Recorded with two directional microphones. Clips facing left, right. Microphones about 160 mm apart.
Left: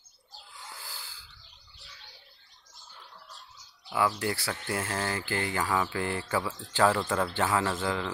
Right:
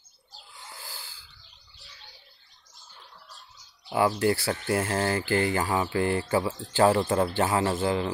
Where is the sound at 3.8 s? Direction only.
30° right (ahead or behind).